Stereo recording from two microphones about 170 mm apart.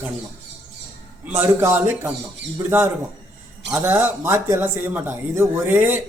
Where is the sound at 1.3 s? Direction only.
15° right (ahead or behind).